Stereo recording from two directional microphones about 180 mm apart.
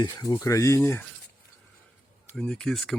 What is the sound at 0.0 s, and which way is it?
Speech, 20° left (ahead or behind).